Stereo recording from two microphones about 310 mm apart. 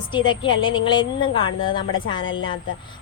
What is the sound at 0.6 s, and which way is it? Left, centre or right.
Speech, centre.